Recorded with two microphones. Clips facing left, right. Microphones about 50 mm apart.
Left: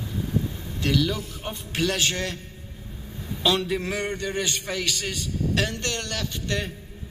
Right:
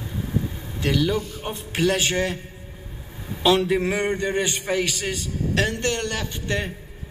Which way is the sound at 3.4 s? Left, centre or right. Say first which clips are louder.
Right 5 dB; centre.